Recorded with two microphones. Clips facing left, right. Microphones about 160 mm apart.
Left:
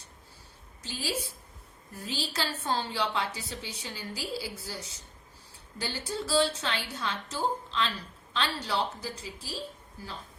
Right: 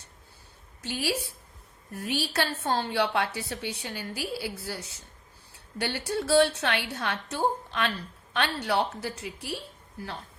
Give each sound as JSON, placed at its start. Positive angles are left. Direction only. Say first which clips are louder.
{"t": 0.8, "sound": "a woman's voice", "louder": "right 4 dB", "side_deg": -65}
{"t": 5.8, "sound": "a woman's voice", "louder": "right 5 dB", "side_deg": -65}